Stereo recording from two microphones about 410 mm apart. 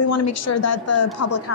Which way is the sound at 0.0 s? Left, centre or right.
Left.